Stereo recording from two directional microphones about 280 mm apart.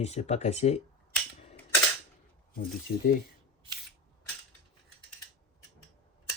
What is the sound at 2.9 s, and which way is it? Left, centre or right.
Speech, left.